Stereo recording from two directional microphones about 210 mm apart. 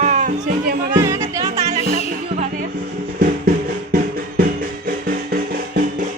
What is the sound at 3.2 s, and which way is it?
Music, 45° right (ahead or behind).